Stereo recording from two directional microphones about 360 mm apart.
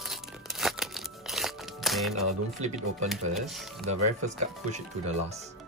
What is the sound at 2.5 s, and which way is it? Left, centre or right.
Speech, centre.